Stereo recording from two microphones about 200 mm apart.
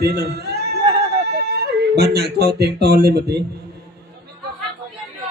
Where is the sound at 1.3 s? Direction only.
55° right (ahead or behind).